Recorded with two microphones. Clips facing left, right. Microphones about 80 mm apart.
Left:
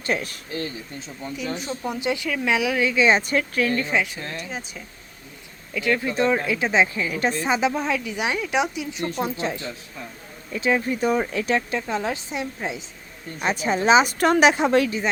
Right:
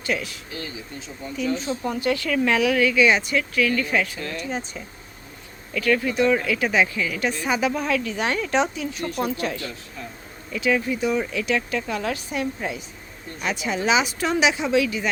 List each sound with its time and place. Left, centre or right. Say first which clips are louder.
0.0 s speech: left 1 dB; left
1.9 s a woman's voice: right 2 dB; centre; by 3.9 s left
3.9 s a woman's voice: even; centre
4.4 s speech: right 4 dB; centre
5.7 s a woman's voice: right 1 dB; centre; by 11.8 s left
11.8 s a woman's voice: left 1 dB; left
13.4 s speech: left 3 dB; left
14.1 s a woman's voice: left 4 dB; left